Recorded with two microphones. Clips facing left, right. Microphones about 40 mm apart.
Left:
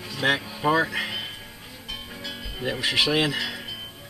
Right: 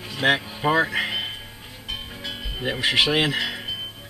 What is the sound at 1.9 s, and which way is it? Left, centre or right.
Music, right.